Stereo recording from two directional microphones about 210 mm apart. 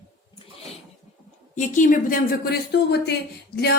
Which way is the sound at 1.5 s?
40° left (ahead or behind).